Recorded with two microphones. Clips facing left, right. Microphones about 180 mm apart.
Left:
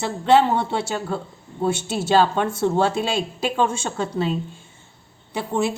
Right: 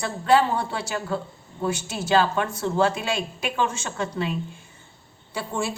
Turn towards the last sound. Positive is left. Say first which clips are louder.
# left 5 dB
turn(degrees=20)  # may be behind; listen again after turning